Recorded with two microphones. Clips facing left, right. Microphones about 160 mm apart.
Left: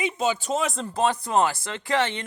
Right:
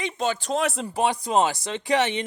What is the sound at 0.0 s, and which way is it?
Speech, 5° left (ahead or behind).